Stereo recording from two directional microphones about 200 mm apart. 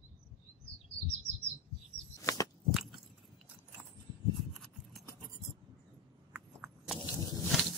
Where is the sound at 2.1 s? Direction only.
15° left (ahead or behind).